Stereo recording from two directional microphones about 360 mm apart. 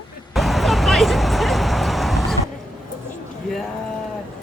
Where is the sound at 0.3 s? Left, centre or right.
Centre.